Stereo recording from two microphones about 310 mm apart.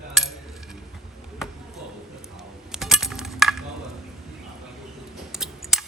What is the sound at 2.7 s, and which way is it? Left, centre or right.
Coin, centre.